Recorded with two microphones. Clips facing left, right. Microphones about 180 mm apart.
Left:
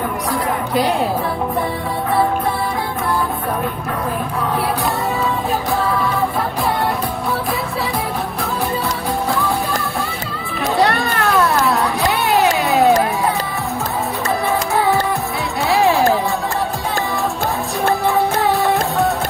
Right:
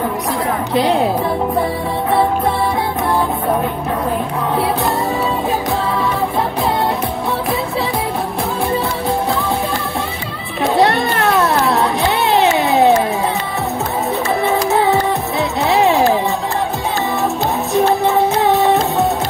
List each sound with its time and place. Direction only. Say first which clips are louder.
10.8 s cat: right 2 dB; 25° right (ahead or behind)
14.7 s music: right 2 dB; 25° right (ahead or behind)
15.7 s a sound: right 1 dB; 20° right (ahead or behind)
18.0 s music: right 3 dB; 20° right (ahead or behind)